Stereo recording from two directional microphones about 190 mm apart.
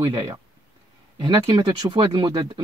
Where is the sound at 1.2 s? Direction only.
20° right (ahead or behind).